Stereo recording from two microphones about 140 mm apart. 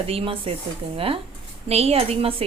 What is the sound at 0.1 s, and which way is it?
A woman's voice, 40° right (ahead or behind).